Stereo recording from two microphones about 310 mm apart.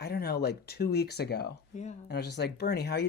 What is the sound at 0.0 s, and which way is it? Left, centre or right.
Speech, left.